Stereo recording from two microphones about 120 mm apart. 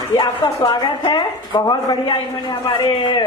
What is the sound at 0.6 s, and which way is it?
Speech, 40° left (ahead or behind).